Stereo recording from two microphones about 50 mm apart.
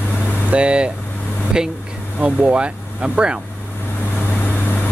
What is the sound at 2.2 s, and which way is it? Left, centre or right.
Speech, right.